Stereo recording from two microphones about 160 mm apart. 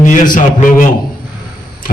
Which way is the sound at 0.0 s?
55° left (ahead or behind).